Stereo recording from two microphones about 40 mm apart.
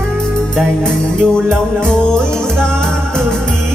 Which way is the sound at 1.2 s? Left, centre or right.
Centre.